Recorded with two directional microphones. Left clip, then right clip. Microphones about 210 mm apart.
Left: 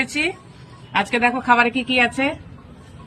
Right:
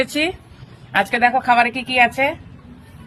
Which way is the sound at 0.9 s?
50° right (ahead or behind).